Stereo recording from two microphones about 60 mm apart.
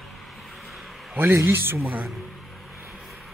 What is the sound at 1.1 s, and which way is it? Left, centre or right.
Speech, right.